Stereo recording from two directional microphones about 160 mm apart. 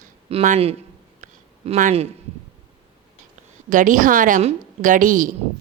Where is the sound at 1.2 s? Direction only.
50° right (ahead or behind).